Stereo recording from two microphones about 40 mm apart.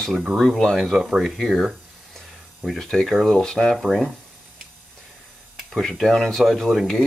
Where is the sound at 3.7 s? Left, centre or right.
Centre.